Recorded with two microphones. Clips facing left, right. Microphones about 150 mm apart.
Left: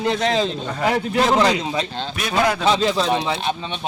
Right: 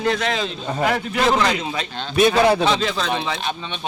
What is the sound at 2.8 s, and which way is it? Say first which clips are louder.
Speech: left 4 dB; 30° left (ahead or behind).